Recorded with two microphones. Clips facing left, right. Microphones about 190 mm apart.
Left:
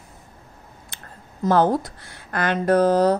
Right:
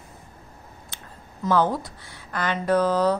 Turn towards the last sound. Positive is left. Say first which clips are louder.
# left 4 dB
turn(degrees=45)  # may be behind; listen again after turning